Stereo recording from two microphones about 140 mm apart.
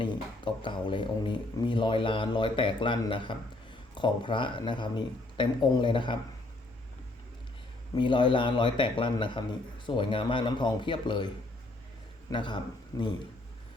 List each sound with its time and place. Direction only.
0.0 s a man's voice: 35° left (ahead or behind)
7.9 s a man's voice: 35° left (ahead or behind)
12.3 s a man's voice: 35° left (ahead or behind)